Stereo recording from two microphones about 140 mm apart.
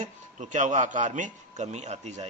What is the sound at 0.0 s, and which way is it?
Speech, 60° right (ahead or behind).